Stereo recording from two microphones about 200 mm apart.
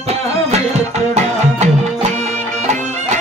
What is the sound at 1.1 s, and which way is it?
Music, 35° right (ahead or behind).